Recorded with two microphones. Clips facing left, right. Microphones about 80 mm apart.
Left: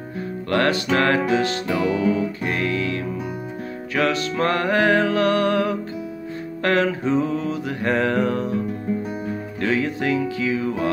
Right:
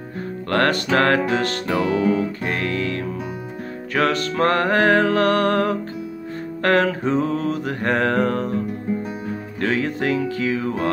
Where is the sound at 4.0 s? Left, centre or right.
Right.